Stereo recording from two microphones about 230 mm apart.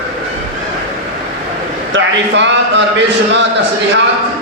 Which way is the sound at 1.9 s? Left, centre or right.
Right.